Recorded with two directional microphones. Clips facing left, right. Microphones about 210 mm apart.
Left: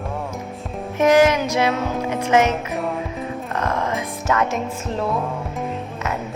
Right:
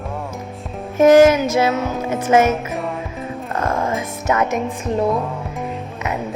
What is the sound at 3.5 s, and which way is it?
Music, 30° right (ahead or behind).